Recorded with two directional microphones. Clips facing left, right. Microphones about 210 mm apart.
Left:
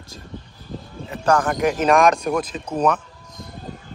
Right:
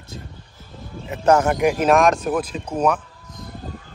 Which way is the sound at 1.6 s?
10° right (ahead or behind).